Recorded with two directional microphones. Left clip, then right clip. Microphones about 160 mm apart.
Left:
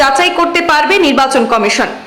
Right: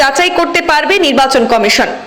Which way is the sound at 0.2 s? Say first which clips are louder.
Even; 20° right (ahead or behind).